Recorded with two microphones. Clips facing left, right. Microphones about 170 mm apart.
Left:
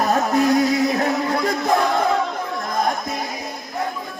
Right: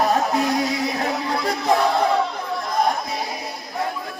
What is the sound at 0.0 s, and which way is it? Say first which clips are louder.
Music: left 2 dB; 50° left (ahead or behind).